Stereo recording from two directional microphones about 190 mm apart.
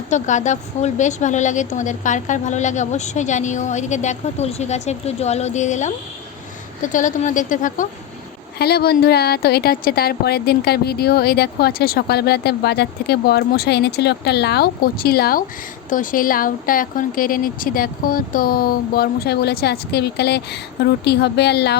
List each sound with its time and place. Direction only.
0.1 s a woman's voice: 40° left (ahead or behind)
8.5 s a woman's voice: 55° left (ahead or behind)